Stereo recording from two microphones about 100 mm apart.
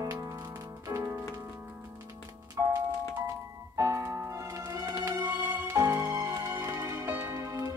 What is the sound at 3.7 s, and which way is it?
Music, 30° right (ahead or behind).